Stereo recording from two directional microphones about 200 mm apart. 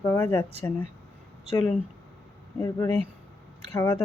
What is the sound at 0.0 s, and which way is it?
Speech, 10° left (ahead or behind).